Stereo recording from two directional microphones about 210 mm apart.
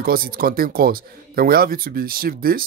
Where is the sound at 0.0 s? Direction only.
45° right (ahead or behind).